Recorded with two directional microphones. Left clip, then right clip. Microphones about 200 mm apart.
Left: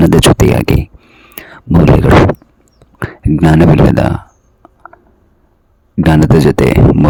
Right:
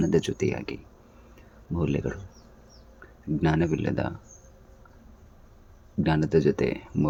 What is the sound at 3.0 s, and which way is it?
Speech, 60° left (ahead or behind).